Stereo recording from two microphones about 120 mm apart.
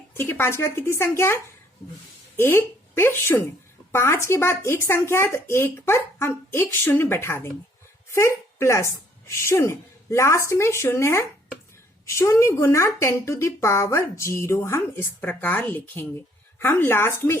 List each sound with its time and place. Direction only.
0.1 s a woman's voice: 20° left (ahead or behind)